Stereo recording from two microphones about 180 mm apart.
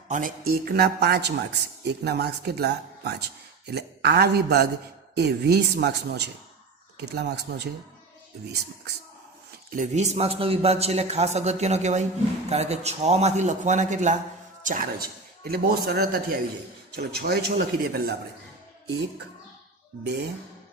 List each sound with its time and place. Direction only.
0.1 s speech: 50° right (ahead or behind); by 7.7 s 70° right (ahead or behind)
9.7 s a man's voice: 40° right (ahead or behind); by 18.1 s 55° right (ahead or behind)